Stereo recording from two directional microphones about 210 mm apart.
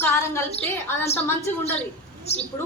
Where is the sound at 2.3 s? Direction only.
30° left (ahead or behind).